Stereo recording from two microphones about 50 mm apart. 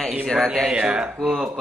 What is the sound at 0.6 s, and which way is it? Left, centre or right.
Speech, centre.